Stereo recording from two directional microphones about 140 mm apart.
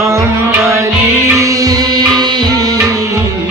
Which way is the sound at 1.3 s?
25° right (ahead or behind).